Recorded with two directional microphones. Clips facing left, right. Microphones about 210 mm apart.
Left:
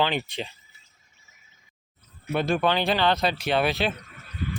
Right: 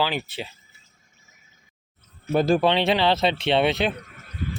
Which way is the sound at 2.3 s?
35° right (ahead or behind).